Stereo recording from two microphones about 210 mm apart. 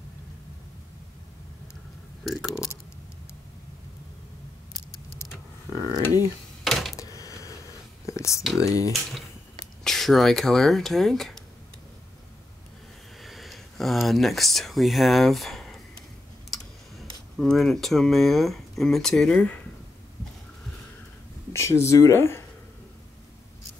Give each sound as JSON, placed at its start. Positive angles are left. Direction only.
{"t": 2.2, "sound": "speech", "side_deg": 0}
{"t": 6.6, "sound": "a sound", "side_deg": 0}
{"t": 7.0, "sound": "a sound", "side_deg": 15}
{"t": 8.1, "sound": "whispering", "side_deg": 15}
{"t": 8.5, "sound": "speech", "side_deg": 15}
{"t": 9.8, "sound": "speech", "side_deg": 0}
{"t": 13.2, "sound": "sniff", "side_deg": 0}
{"t": 14.0, "sound": "speech", "side_deg": 0}
{"t": 16.4, "sound": "clicking", "side_deg": 0}
{"t": 17.4, "sound": "speech", "side_deg": 0}
{"t": 21.5, "sound": "speech", "side_deg": 15}